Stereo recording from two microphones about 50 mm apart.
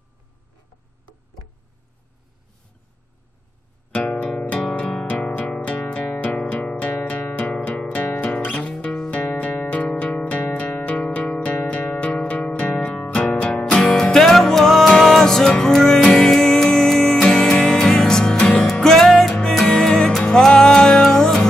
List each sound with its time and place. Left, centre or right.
3.9 s music: centre; by 7.3 s left
7.3 s music: left